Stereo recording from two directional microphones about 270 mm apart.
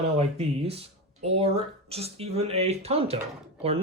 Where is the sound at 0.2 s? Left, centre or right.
Right.